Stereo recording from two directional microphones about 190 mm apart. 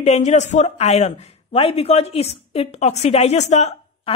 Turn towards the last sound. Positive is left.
turn(degrees=35)  # may be behind; listen again after turning